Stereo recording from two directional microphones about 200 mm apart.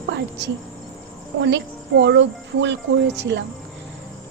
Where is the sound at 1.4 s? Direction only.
60° right (ahead or behind).